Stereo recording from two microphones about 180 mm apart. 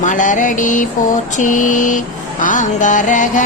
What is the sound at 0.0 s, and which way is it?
Music, 45° left (ahead or behind).